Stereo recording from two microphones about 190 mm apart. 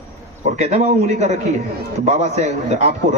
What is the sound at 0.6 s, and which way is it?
A man's voice, 35° right (ahead or behind).